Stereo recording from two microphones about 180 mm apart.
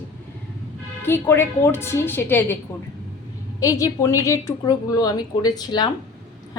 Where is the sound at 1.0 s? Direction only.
10° left (ahead or behind).